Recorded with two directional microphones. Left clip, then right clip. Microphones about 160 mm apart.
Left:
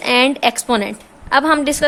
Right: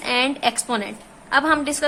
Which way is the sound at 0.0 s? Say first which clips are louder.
Left 6 dB; 45° left (ahead or behind).